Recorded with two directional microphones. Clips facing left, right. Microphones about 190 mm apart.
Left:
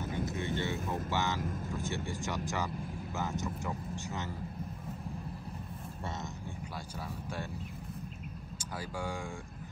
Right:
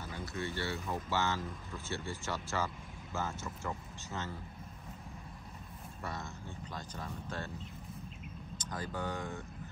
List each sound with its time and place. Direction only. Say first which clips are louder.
0.1 s speech: left 3 dB; 20° left (ahead or behind)
7.0 s speech: left 2 dB; 10° left (ahead or behind)
8.5 s speech: even; 10° left (ahead or behind)